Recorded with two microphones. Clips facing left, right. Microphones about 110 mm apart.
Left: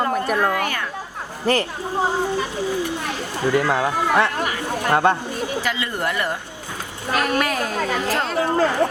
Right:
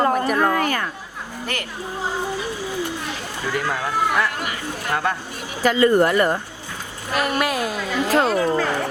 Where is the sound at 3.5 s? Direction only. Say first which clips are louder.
Left 3 dB; 25° left (ahead or behind).